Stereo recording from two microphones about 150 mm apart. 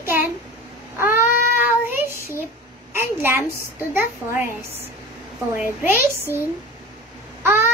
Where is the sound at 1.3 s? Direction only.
70° left (ahead or behind).